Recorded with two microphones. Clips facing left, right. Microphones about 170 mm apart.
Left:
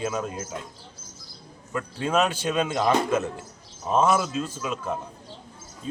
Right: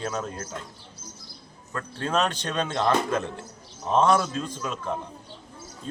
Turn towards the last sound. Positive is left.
turn(degrees=5)  # may be behind; listen again after turning